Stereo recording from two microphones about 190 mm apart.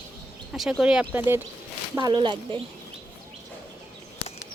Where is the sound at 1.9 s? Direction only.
25° right (ahead or behind).